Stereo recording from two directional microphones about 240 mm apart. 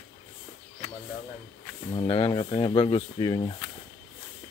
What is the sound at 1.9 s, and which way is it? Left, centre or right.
Speech, left.